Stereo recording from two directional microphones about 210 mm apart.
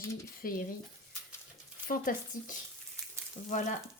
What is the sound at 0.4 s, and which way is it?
Frying, 45° left (ahead or behind).